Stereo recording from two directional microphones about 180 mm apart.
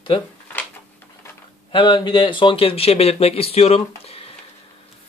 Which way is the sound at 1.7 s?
25° left (ahead or behind).